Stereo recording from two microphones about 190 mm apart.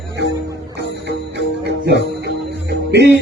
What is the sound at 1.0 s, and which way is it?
Music, 60° right (ahead or behind).